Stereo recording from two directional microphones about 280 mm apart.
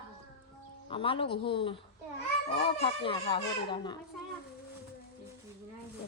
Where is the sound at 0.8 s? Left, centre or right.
Centre.